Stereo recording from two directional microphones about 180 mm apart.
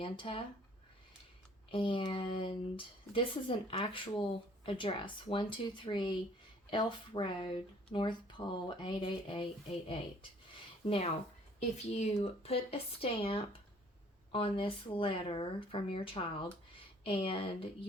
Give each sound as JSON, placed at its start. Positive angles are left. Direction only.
{"t": 0.0, "sound": "speech", "side_deg": 30}
{"t": 1.7, "sound": "speech", "side_deg": 30}
{"t": 10.8, "sound": "speech", "side_deg": 30}